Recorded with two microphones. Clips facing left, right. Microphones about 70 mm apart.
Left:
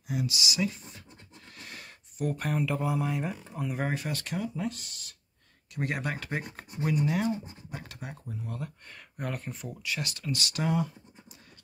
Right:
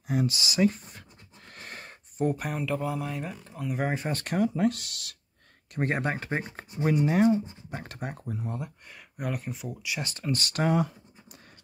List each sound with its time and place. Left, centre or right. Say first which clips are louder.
0.1 s speech: right 4 dB; right
1.5 s a sound: right 4 dB; right
2.3 s speech: left 2 dB; centre
2.6 s speech: left 1 dB; centre
4.1 s speech: right 6 dB; right
5.8 s speech: right 4 dB; right
8.5 s speech: right 2 dB; centre
8.9 s speech: right 3 dB; centre
10.0 s speech: right 3 dB; right